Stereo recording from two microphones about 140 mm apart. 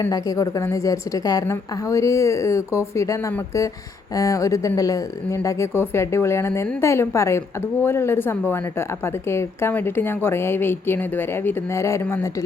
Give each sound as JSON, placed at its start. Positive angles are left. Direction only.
{"t": 0.0, "sound": "a woman's voice", "side_deg": 25}